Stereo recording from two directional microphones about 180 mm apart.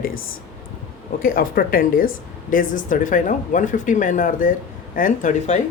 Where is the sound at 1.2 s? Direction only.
55° left (ahead or behind).